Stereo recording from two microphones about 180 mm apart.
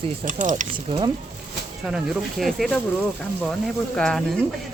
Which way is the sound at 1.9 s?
Centre (ahead or behind).